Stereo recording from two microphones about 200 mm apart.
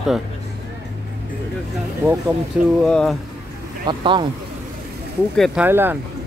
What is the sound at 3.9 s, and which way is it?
Speech, 25° right (ahead or behind).